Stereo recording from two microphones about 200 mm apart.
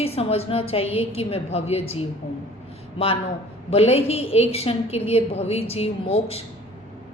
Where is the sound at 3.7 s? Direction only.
30° left (ahead or behind).